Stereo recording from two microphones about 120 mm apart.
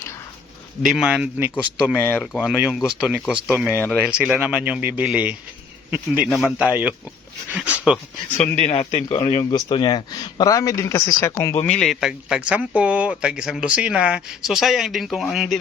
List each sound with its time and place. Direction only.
0.8 s speech: 5° right (ahead or behind)
2.0 s speech: 20° left (ahead or behind)
2.2 s speech: centre (ahead or behind)
3.7 s speech: 15° left (ahead or behind)
4.0 s speech: 10° right (ahead or behind)
8.5 s speech: 70° left (ahead or behind); by 9.4 s 55° left (ahead or behind)
9.4 s speech: 35° left (ahead or behind)
11.6 s speech: 10° left (ahead or behind)